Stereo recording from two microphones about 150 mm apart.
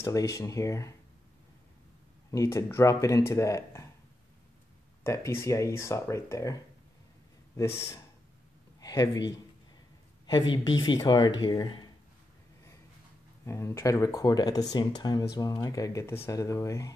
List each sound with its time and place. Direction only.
0.0 s speech: 20° left (ahead or behind)
2.3 s speech: 20° left (ahead or behind)
5.0 s speech: 20° left (ahead or behind)
8.8 s a man's voice: 25° left (ahead or behind)
13.5 s speech: 20° left (ahead or behind)